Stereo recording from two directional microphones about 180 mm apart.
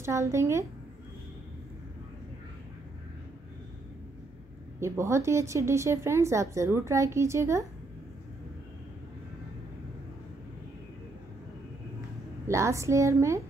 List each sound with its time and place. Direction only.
0.0 s speech: 15° right (ahead or behind)
4.7 s speech: 15° right (ahead or behind)
12.4 s speech: 15° right (ahead or behind)